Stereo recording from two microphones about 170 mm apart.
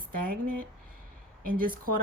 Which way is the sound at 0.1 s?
55° right (ahead or behind).